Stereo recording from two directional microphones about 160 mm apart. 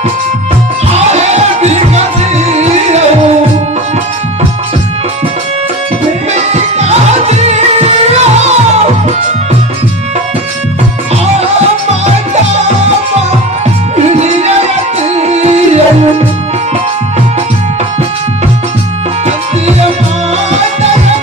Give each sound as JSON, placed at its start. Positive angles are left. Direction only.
{"t": 0.9, "sound": "music", "side_deg": -45}
{"t": 6.8, "sound": "music", "side_deg": -45}
{"t": 13.9, "sound": "music", "side_deg": -45}